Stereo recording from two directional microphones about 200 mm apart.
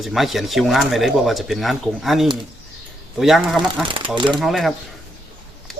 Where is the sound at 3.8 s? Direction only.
25° right (ahead or behind).